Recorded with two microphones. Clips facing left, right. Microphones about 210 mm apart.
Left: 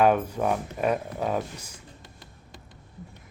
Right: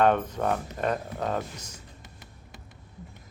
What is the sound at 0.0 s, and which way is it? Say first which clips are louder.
Speech: left 1 dB; 10° left (ahead or behind).